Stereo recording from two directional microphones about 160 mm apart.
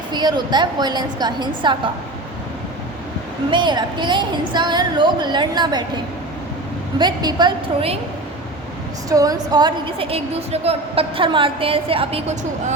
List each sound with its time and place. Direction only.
0.1 s a woman's voice: 25° right (ahead or behind)
3.5 s a woman's voice: 30° right (ahead or behind)
7.0 s a woman's voice: 25° right (ahead or behind)
9.0 s a woman's voice: 20° right (ahead or behind)